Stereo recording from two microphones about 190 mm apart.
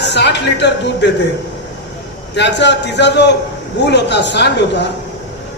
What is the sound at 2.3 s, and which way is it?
A man's voice, 65° left (ahead or behind).